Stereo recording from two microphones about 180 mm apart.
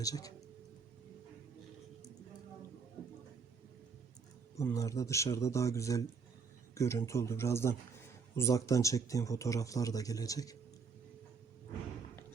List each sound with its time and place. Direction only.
0.0 s speech: 20° left (ahead or behind)
4.5 s speech: 15° left (ahead or behind)